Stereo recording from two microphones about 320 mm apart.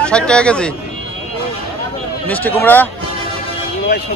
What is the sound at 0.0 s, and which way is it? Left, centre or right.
Speech, centre.